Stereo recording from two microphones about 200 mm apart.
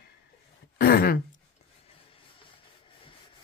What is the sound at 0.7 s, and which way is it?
Throat clearing, 50° left (ahead or behind).